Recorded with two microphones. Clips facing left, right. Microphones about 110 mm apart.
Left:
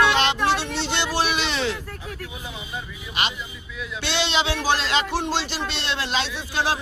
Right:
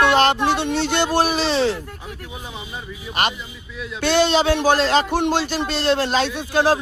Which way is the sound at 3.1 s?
50° right (ahead or behind).